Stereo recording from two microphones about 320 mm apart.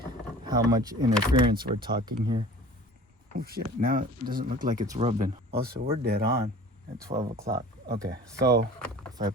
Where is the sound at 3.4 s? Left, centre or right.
Right.